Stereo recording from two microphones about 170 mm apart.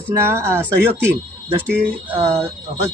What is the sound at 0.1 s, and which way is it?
Speech, 15° right (ahead or behind).